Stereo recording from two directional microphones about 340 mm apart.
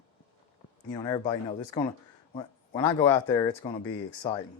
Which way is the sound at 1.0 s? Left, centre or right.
Centre.